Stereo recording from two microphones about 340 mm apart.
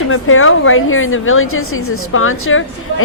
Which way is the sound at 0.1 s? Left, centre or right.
Left.